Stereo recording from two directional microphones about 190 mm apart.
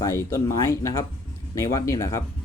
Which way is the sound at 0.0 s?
15° left (ahead or behind).